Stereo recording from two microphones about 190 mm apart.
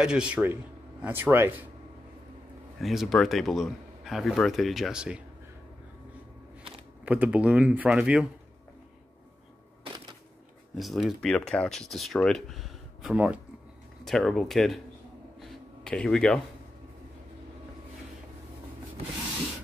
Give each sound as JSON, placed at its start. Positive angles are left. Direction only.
{"t": 0.0, "sound": "speech", "side_deg": -5}
{"t": 2.8, "sound": "speech", "side_deg": 0}
{"t": 7.1, "sound": "speech", "side_deg": -5}
{"t": 9.8, "sound": "a sound", "side_deg": -25}
{"t": 10.8, "sound": "speech", "side_deg": 0}
{"t": 15.4, "sound": "a sound", "side_deg": 0}